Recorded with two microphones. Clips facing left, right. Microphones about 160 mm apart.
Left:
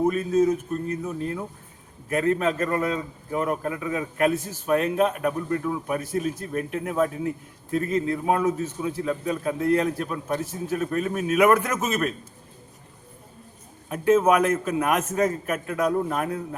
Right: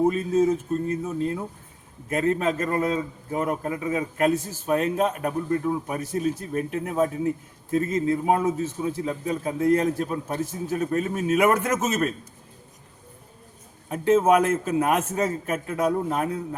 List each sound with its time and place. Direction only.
0.0 s a man's voice: 30° right (ahead or behind)
13.9 s a man's voice: 30° right (ahead or behind)